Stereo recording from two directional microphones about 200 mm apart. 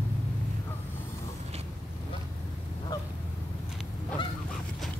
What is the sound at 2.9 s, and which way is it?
Honk, 20° left (ahead or behind).